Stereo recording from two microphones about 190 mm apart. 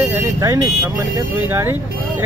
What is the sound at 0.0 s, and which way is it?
Vehicle, 15° right (ahead or behind).